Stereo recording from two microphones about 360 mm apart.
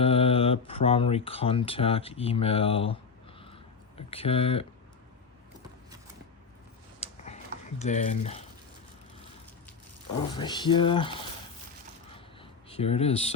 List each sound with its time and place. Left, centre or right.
0.0 s speech: centre
3.4 s a sound: centre
7.0 s tick-tock: centre
7.8 s speech: centre
10.3 s speech: centre
12.1 s a sound: centre